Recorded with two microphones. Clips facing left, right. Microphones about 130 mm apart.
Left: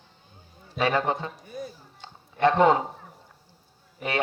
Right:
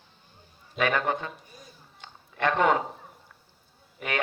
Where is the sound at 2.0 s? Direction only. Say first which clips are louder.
Left 5 dB; 30° left (ahead or behind).